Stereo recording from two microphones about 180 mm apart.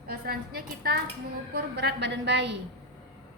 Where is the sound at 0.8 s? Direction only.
55° right (ahead or behind).